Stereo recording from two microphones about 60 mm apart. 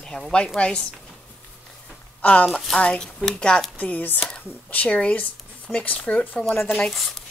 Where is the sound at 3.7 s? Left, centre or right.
Left.